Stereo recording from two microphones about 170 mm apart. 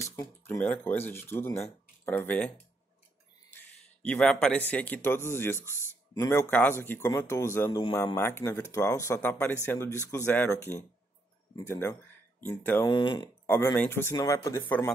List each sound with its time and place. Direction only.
0.0 s speech: 15° left (ahead or behind)
4.0 s speech: 5° left (ahead or behind)
12.9 s speech: 25° left (ahead or behind)
13.5 s speech: 10° left (ahead or behind)